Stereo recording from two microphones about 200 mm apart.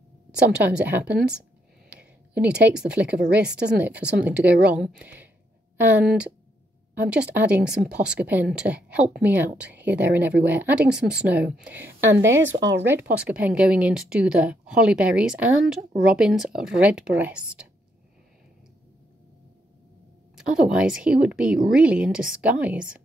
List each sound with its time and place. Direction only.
0.5 s a woman's voice: 5° right (ahead or behind)
12.5 s speech: 65° right (ahead or behind)
12.8 s speech: 10° right (ahead or behind)
20.3 s speech: 5° right (ahead or behind)